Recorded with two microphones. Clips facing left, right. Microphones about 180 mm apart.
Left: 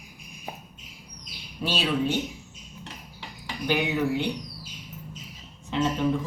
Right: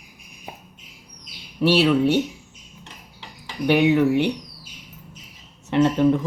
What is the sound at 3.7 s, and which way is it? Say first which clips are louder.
Speech: right 8 dB; 70° right (ahead or behind).